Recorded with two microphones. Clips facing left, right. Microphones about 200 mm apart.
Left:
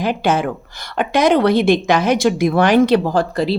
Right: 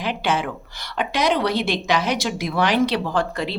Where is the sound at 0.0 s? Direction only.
45° left (ahead or behind).